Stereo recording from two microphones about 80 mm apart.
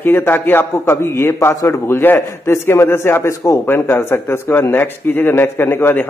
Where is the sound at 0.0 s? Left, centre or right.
Left.